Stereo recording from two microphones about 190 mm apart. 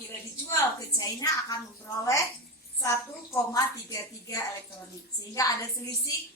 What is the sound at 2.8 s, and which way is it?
A woman's voice, 15° left (ahead or behind).